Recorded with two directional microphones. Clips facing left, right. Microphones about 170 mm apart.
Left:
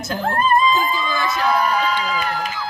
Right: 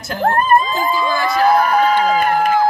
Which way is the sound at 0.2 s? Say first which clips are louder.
Right 4 dB; 60° right (ahead or behind).